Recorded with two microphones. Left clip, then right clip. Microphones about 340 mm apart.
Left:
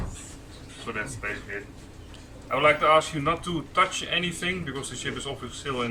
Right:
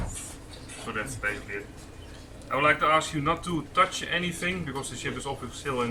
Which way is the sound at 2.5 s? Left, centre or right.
Centre.